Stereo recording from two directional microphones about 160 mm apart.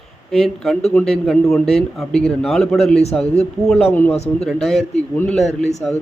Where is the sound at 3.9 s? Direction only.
10° left (ahead or behind).